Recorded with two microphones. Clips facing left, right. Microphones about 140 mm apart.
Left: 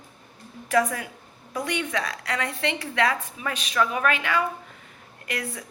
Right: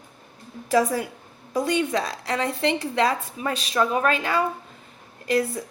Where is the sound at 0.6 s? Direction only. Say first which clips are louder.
Right 2 dB; 30° right (ahead or behind).